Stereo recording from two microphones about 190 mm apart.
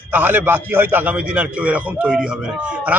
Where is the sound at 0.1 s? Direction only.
10° right (ahead or behind).